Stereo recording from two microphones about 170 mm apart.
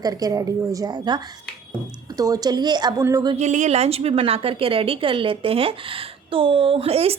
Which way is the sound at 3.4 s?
45° right (ahead or behind).